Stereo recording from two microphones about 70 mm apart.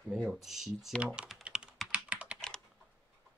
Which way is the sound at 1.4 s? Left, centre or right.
Centre.